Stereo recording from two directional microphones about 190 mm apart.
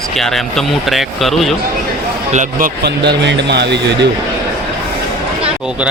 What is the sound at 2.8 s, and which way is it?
A man's voice, 60° right (ahead or behind).